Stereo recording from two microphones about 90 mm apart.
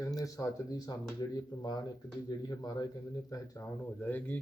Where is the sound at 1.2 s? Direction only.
50° left (ahead or behind).